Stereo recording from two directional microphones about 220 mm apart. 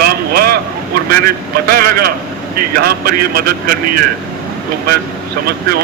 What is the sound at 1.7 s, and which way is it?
A man's voice, 40° right (ahead or behind).